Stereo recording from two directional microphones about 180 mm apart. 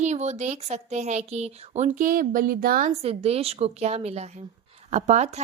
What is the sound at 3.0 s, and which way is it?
Speech, 35° right (ahead or behind).